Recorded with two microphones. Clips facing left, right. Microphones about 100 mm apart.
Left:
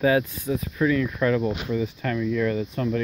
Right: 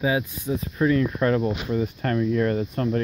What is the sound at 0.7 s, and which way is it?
Speech, 35° right (ahead or behind).